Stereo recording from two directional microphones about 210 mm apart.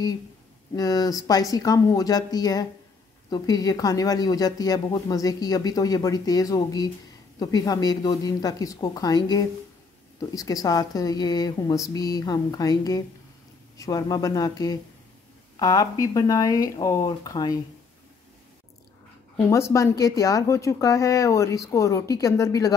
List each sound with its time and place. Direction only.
0.7 s speech: 15° left (ahead or behind)
19.4 s speech: 15° left (ahead or behind)